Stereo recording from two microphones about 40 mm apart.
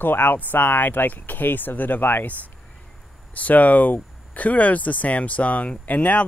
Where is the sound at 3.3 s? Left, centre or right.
Left.